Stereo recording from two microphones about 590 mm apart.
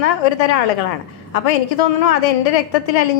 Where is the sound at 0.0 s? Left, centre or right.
Left.